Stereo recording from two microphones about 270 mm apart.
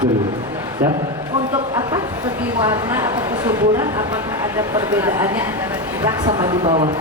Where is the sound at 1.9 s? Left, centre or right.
Centre.